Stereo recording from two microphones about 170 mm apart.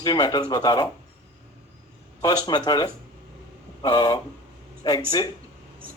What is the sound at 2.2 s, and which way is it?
A man's voice, 25° left (ahead or behind).